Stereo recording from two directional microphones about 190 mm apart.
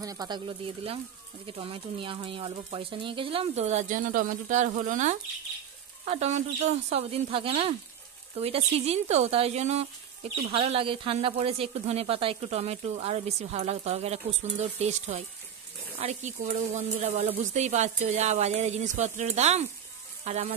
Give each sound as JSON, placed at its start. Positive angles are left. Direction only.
{"t": 0.0, "sound": "speech", "side_deg": -20}